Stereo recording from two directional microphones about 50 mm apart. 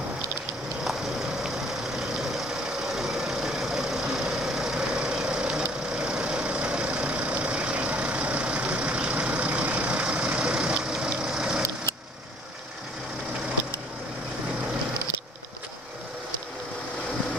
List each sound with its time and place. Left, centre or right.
2.0 s vehicle: centre